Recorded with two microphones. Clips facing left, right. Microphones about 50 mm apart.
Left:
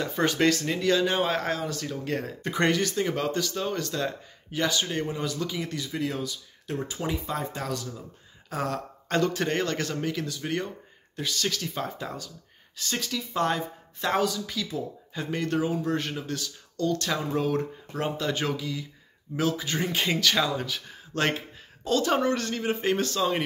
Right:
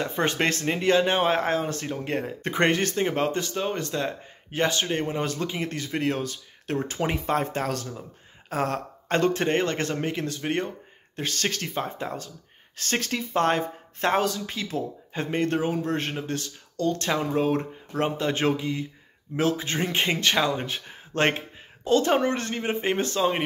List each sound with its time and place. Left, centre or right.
0.0 s speech: right
4.5 s speech: right
11.7 s speech: right
12.7 s a man's voice: right